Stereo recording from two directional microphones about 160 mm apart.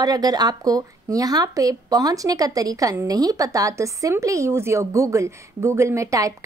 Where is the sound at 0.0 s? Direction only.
25° right (ahead or behind).